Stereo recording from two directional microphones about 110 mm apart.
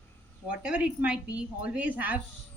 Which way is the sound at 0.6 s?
10° right (ahead or behind).